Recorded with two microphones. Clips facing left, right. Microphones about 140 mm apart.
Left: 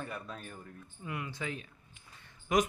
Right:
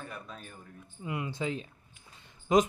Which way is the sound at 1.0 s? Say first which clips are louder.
Right 5 dB; 20° right (ahead or behind).